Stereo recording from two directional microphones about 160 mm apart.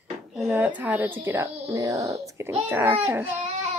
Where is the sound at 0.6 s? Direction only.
10° right (ahead or behind).